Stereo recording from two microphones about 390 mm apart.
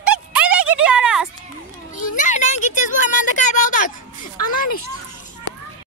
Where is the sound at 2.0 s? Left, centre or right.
Centre.